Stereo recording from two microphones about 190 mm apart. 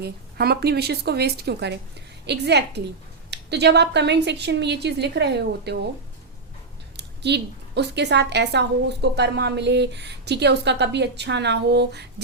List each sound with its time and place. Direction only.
0.0 s a woman's voice: 55° right (ahead or behind)
6.9 s a woman's voice: 60° right (ahead or behind)